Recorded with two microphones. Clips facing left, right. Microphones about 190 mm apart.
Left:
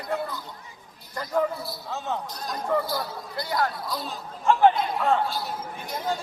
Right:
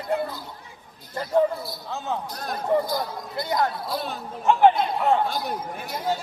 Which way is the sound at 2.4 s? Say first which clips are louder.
Right 2 dB; 60° right (ahead or behind).